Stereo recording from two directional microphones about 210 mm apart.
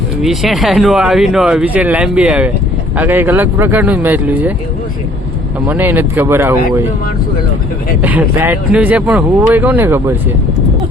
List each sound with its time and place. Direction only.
0.2 s speech: centre (ahead or behind)
5.6 s speech: 10° right (ahead or behind)
8.0 s speech: 10° right (ahead or behind)